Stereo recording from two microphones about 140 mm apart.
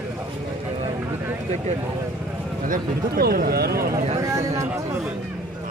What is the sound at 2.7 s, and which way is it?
Speech, 90° right.